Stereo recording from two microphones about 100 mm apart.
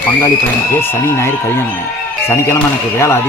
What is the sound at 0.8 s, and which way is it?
Speech, 25° left (ahead or behind).